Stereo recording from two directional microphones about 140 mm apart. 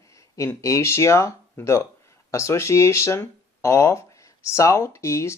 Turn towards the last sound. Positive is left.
turn(degrees=20)  # may be behind; listen again after turning